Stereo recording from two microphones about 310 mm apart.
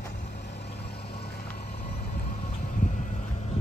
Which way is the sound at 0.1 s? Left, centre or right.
Left.